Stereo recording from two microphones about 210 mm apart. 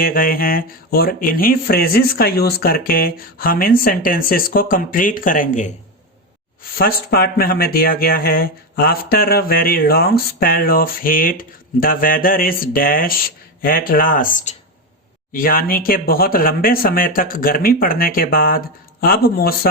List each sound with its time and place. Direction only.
0.0 s speech: 45° left (ahead or behind)
6.7 s speech: 45° left (ahead or behind)